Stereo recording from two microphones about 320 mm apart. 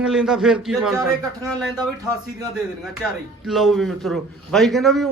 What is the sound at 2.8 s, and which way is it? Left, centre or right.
A man's voice, centre.